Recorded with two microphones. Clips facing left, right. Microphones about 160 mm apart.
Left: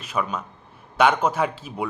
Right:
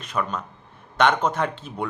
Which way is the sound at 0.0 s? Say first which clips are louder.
Left 1 dB; 5° left (ahead or behind).